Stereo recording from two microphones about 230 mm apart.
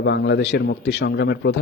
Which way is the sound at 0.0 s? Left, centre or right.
Left.